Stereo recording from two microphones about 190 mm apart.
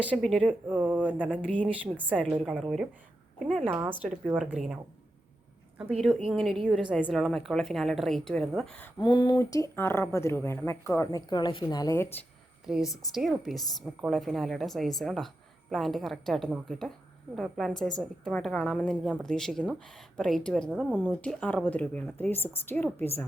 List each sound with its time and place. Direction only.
0.0 s a woman's voice: centre (ahead or behind)
0.7 s speech: 10° right (ahead or behind)
1.3 s speech: 5° left (ahead or behind)
1.6 s a woman's voice: 10° right (ahead or behind)
3.7 s a woman's voice: 10° right (ahead or behind); by 8.9 s 5° left (ahead or behind)
9.0 s speech: 20° left (ahead or behind)
12.6 s a woman's voice: 5° right (ahead or behind)